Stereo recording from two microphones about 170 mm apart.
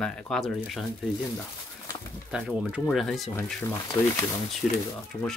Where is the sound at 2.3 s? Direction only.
5° right (ahead or behind).